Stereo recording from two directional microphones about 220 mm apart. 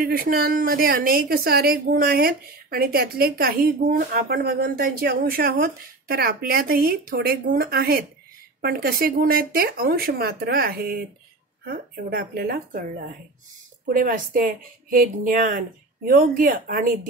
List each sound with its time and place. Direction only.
0.0 s a woman's voice: 40° right (ahead or behind)
13.8 s a woman's voice: 40° right (ahead or behind)